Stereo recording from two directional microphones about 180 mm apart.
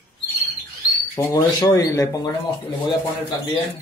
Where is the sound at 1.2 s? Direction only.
20° left (ahead or behind).